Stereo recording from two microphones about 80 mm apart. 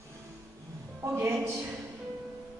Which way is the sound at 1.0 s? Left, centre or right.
Right.